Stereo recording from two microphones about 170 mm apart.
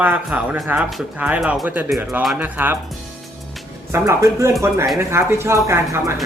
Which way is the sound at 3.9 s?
15° right (ahead or behind).